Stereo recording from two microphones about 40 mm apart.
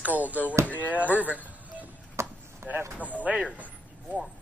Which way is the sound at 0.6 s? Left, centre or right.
Left.